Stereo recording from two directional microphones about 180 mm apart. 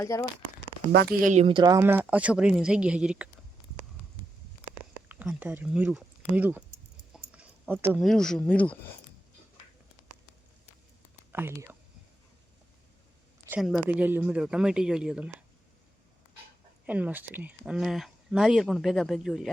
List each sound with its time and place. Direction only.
0.0 s speech: 15° left (ahead or behind)
0.9 s speech: 60° right (ahead or behind)
1.3 s speech: 35° right (ahead or behind); by 3.2 s 5° right (ahead or behind)
5.0 s speech: 10° right (ahead or behind)
7.1 s a sound: 5° right (ahead or behind)
8.0 s speech: 5° left (ahead or behind)
11.3 s speech: 10° right (ahead or behind)
13.6 s speech: centre (ahead or behind)
16.8 s speech: 10° right (ahead or behind)